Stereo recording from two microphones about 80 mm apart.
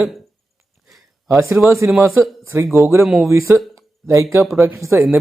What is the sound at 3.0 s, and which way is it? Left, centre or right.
Speech, centre.